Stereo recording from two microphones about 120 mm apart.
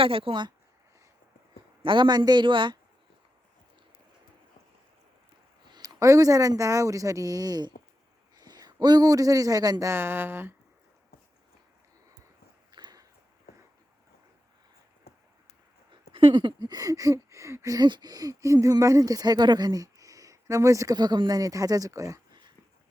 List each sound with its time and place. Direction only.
0.0 s speech: 50° right (ahead or behind)
1.8 s speech: 45° right (ahead or behind)
5.6 s a man's voice: 35° right (ahead or behind)
9.9 s speech: 20° right (ahead or behind)
12.7 s a sound: 35° right (ahead or behind)
15.9 s a sound: 45° right (ahead or behind); by 22.4 s 25° right (ahead or behind)